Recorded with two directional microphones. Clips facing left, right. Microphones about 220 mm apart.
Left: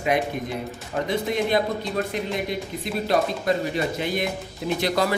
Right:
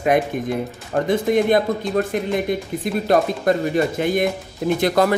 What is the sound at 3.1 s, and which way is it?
Speech, 50° right (ahead or behind).